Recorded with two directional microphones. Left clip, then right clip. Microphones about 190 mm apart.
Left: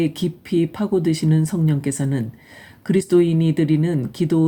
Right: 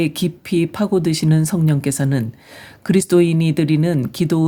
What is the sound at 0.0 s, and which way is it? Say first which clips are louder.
Speech: right 2 dB; 40° right (ahead or behind).